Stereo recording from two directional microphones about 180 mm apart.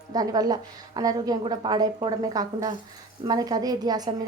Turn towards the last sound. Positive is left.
turn(degrees=-20)  # may be behind; listen again after turning